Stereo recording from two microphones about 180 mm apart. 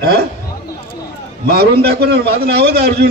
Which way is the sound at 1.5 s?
60° right (ahead or behind).